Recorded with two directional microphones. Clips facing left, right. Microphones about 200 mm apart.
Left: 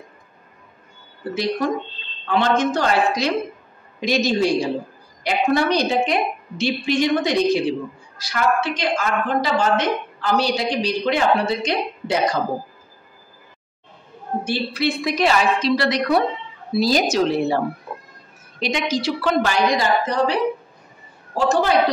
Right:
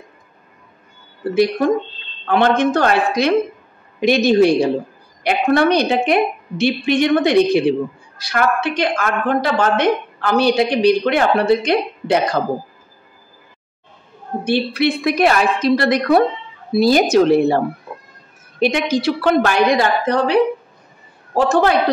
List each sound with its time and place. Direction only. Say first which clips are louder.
1.3 s a woman's voice: right 7 dB; 55° right (ahead or behind)
14.4 s a woman's voice: right 6 dB; 60° right (ahead or behind)
18.6 s a woman's voice: right 6 dB; 55° right (ahead or behind)
21.4 s a woman's voice: right 4 dB; 60° right (ahead or behind)